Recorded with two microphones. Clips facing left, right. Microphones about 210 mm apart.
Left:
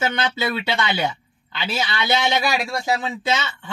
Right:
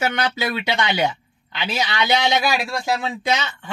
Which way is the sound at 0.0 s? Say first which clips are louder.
Even; 15° right (ahead or behind).